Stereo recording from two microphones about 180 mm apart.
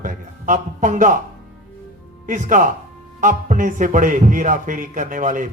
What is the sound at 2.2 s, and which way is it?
A man's voice, 45° right (ahead or behind).